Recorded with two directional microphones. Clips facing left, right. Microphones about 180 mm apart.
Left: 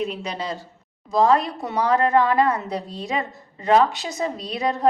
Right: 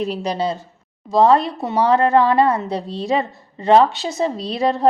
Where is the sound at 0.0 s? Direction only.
35° right (ahead or behind).